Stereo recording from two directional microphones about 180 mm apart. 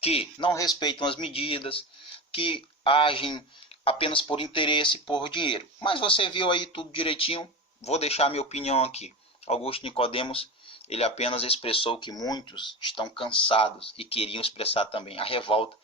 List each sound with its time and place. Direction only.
0.0 s speech: 35° left (ahead or behind)